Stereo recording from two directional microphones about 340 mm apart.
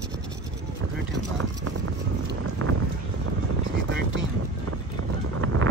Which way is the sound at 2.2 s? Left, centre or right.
Right.